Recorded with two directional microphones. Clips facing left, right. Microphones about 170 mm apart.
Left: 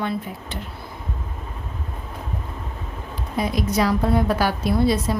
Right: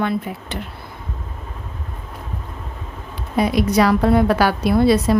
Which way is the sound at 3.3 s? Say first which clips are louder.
Right 6 dB; 70° right (ahead or behind).